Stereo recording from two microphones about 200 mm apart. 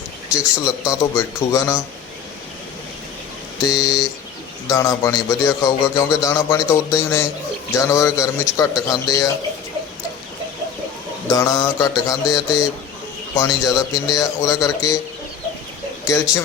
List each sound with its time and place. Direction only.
0.3 s a man's voice: 15° left (ahead or behind)
3.6 s a man's voice: 15° left (ahead or behind)
11.3 s a man's voice: 15° left (ahead or behind)